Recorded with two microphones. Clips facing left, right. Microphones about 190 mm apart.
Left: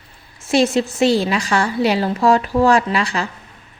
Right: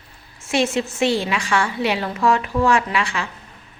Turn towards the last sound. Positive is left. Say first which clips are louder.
# left 3 dB
turn(degrees=35)  # may be behind; listen again after turning